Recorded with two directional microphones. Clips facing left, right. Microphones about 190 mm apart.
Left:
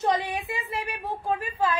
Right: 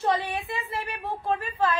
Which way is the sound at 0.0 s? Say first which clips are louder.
Even; 15° left (ahead or behind).